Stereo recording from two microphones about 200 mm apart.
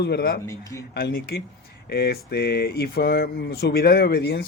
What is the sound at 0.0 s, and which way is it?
Speech, 50° left (ahead or behind).